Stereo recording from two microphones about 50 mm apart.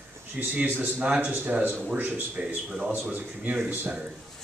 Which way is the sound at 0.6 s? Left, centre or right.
Right.